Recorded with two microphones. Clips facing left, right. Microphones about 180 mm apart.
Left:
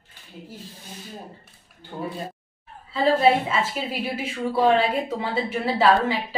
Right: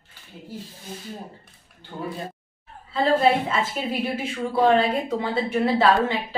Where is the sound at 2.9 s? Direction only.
5° left (ahead or behind).